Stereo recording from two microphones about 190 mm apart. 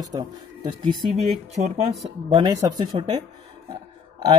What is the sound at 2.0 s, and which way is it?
Speech, 30° right (ahead or behind).